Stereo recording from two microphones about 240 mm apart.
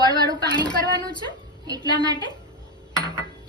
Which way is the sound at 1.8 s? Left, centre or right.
Centre.